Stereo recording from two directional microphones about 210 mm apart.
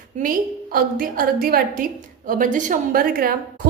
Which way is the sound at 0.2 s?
45° right (ahead or behind).